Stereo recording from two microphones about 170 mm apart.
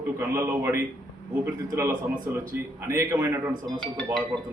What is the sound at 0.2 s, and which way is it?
Speech, 15° right (ahead or behind).